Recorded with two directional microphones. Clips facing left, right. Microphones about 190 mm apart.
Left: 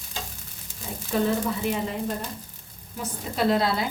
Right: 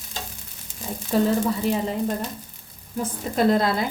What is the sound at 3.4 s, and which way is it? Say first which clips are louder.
Speech: right 3 dB; 50° right (ahead or behind).